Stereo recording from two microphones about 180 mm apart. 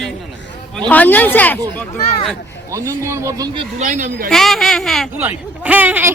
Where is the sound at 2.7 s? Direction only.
15° right (ahead or behind).